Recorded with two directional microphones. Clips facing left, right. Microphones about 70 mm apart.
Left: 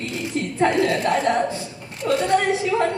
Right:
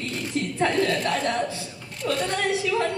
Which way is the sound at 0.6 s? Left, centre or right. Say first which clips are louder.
Left 4 dB; centre.